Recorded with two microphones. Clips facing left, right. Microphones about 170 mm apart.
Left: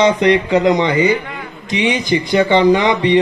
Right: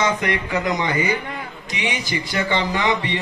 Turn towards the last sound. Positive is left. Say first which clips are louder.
# left 10 dB
turn(degrees=20)  # may be behind; listen again after turning